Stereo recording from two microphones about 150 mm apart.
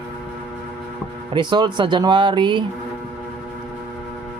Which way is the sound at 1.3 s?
30° right (ahead or behind).